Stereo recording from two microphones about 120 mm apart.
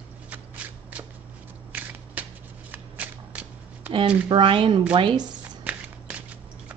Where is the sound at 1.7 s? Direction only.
15° right (ahead or behind).